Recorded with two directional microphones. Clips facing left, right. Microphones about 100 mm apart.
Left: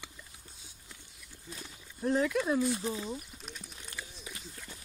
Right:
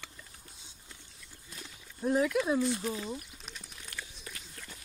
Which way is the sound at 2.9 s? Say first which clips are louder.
Even; 5° left (ahead or behind).